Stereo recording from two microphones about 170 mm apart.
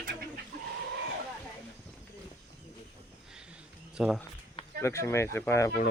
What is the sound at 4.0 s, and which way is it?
Speech, 5° right (ahead or behind).